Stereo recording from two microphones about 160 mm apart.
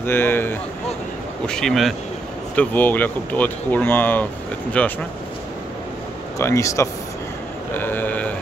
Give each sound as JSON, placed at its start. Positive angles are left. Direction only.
{"t": 0.0, "sound": "speech", "side_deg": 15}
{"t": 6.3, "sound": "speech", "side_deg": 20}